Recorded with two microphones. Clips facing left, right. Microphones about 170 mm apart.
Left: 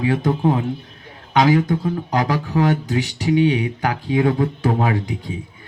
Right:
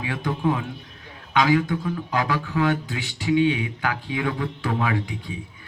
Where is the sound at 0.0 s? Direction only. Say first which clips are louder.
Left 7 dB; 40° left (ahead or behind).